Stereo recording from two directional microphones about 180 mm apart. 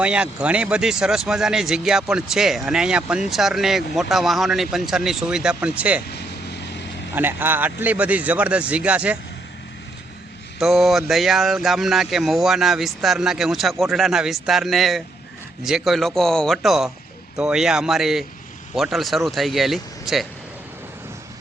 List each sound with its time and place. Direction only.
0.0 s speech: 5° right (ahead or behind)
6.1 s vehicle: 65° left (ahead or behind)
7.1 s speech: 10° right (ahead or behind)
10.6 s speech: centre (ahead or behind)